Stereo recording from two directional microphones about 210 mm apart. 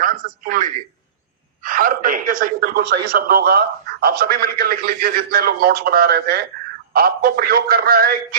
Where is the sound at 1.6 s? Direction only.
40° right (ahead or behind).